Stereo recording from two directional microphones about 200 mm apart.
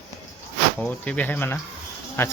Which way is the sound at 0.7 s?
5° left (ahead or behind).